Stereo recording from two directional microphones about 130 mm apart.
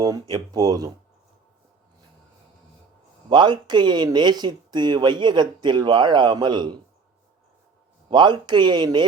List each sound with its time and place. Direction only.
0.0 s speech: 30° right (ahead or behind)
3.2 s speech: 35° right (ahead or behind)
8.1 s speech: 35° right (ahead or behind)